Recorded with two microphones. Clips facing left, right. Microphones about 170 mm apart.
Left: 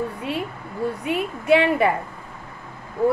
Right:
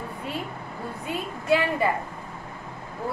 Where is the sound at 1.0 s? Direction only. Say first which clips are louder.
Left 3 dB; 70° left (ahead or behind).